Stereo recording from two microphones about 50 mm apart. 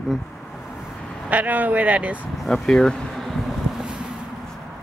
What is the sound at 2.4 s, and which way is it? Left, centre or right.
Speech, centre.